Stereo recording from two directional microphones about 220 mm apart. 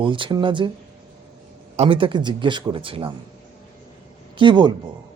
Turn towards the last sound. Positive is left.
turn(degrees=-20)  # may be behind; listen again after turning